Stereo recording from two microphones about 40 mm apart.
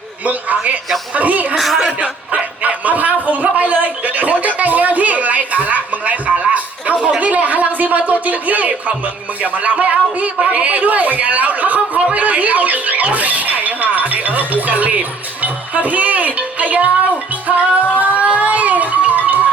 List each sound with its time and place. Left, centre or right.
0.3 s speech: right
1.5 s speech: centre
2.0 s a man's voice: right
12.1 s a sound: right
14.8 s speech: right
17.5 s music: right